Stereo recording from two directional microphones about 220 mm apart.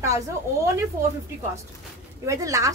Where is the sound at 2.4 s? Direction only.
15° right (ahead or behind).